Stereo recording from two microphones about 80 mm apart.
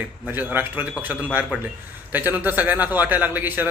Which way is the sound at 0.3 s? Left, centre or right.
Right.